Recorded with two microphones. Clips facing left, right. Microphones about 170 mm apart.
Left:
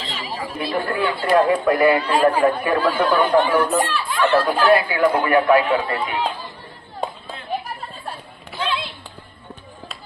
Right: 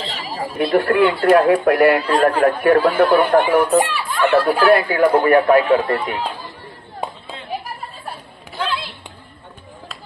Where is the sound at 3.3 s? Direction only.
55° right (ahead or behind).